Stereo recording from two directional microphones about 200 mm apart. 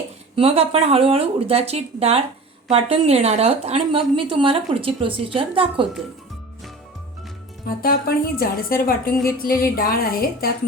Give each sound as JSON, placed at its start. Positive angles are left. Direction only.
{"t": 0.3, "sound": "speech", "side_deg": -30}
{"t": 7.8, "sound": "a woman's voice", "side_deg": 45}